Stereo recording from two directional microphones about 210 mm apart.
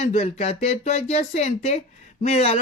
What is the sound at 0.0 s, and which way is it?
Speech, 30° left (ahead or behind).